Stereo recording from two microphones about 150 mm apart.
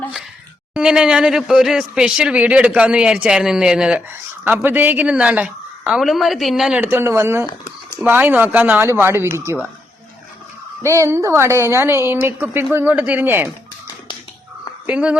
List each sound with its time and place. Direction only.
0.7 s speech: 5° right (ahead or behind)
6.8 s speech: 15° right (ahead or behind)
7.4 s a sound: 20° left (ahead or behind)
7.9 s speech: 10° right (ahead or behind)
10.8 s a woman's voice: 20° right (ahead or behind)
14.8 s speech: 10° right (ahead or behind)